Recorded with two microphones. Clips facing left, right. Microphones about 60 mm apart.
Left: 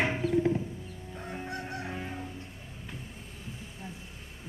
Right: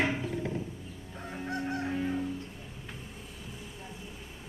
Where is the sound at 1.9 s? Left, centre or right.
Centre.